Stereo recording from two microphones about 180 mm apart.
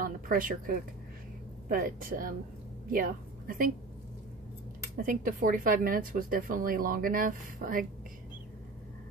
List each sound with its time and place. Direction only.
0.0 s a woman's voice: 50° right (ahead or behind)
4.9 s speech: 50° right (ahead or behind)